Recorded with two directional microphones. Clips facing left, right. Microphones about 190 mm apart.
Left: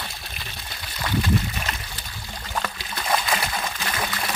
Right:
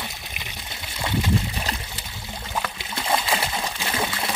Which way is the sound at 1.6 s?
25° right (ahead or behind).